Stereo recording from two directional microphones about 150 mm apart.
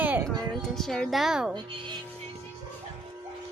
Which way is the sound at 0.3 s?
5° left (ahead or behind).